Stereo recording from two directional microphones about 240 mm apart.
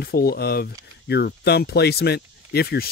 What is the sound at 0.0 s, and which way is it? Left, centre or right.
Speech, left.